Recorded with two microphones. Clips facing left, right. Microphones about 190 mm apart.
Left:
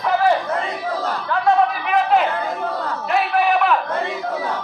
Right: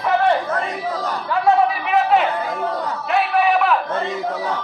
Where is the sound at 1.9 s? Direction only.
Centre (ahead or behind).